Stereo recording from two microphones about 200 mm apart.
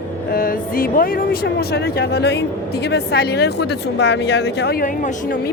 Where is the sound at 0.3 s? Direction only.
45° left (ahead or behind).